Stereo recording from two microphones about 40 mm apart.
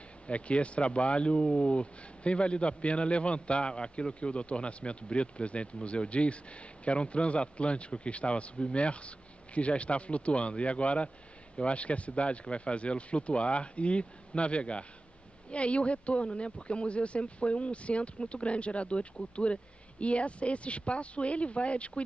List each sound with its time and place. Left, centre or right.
0.3 s speech: left